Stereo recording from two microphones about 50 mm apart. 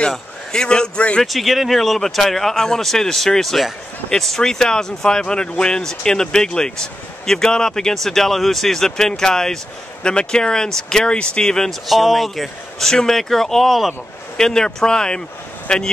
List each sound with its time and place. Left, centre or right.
0.1 s a man's voice: centre
1.2 s speech: centre
11.9 s speech: centre
14.3 s speech: centre